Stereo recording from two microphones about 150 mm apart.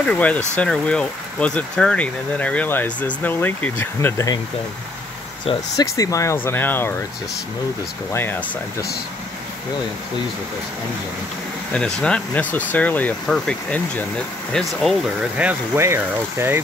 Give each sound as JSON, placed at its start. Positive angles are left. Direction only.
{"t": 0.0, "sound": "speech", "side_deg": 10}
{"t": 5.8, "sound": "speech", "side_deg": 20}
{"t": 8.1, "sound": "speech", "side_deg": 15}
{"t": 11.7, "sound": "speech", "side_deg": 5}
{"t": 15.4, "sound": "speech", "side_deg": -15}